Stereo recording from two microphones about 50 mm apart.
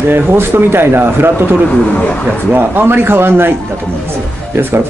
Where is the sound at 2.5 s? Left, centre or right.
Right.